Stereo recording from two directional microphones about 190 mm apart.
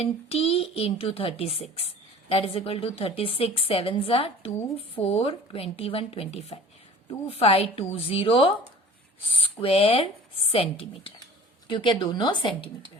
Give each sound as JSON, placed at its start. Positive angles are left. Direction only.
{"t": 0.0, "sound": "a woman's voice", "side_deg": 30}